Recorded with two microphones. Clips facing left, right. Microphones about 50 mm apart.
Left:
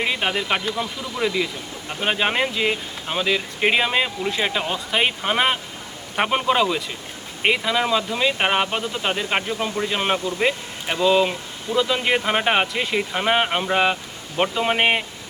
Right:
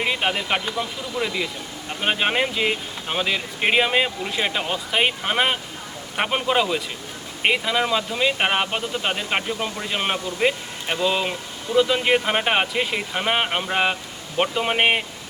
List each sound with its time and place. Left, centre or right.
0.0 s a man's voice: centre